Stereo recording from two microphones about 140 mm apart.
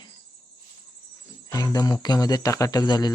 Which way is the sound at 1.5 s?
25° left (ahead or behind).